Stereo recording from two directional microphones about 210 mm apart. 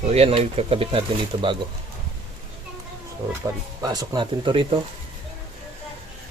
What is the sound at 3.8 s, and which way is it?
Speech, 20° right (ahead or behind).